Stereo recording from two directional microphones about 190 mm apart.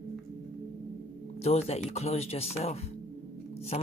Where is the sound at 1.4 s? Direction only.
35° left (ahead or behind).